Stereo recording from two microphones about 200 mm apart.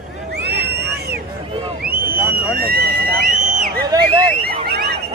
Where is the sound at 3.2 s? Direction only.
45° right (ahead or behind).